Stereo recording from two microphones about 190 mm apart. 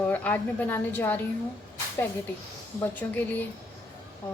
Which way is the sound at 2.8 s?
10° left (ahead or behind).